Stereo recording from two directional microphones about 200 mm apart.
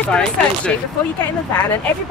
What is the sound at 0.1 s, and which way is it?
Speech, 5° left (ahead or behind).